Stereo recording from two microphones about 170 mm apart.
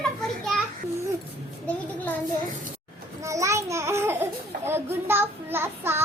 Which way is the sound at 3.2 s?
20° right (ahead or behind).